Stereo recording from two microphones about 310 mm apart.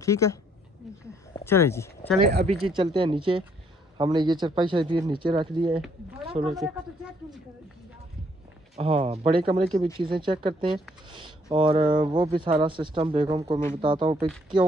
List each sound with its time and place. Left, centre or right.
0.0 s speech: centre
2.3 s speech: right
6.6 s speech: centre
8.7 s speech: centre